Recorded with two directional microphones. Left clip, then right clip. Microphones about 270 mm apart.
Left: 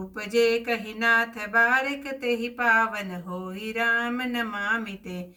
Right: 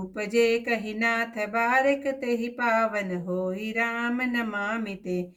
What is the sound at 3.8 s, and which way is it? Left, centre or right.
Speech, centre.